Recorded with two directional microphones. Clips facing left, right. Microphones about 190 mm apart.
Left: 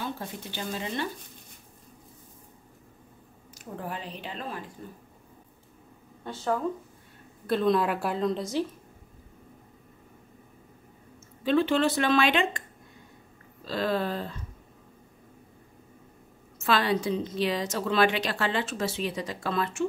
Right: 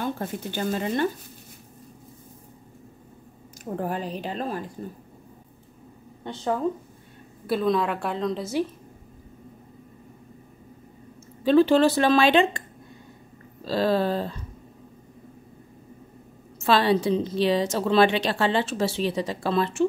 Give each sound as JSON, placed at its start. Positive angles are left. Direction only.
{"t": 0.0, "sound": "speech", "side_deg": -50}
{"t": 3.6, "sound": "speech", "side_deg": -45}
{"t": 6.2, "sound": "a woman's voice", "side_deg": -20}
{"t": 7.4, "sound": "a woman's voice", "side_deg": -5}
{"t": 11.4, "sound": "speech", "side_deg": -35}
{"t": 13.7, "sound": "speech", "side_deg": -30}
{"t": 16.5, "sound": "a woman's voice", "side_deg": -30}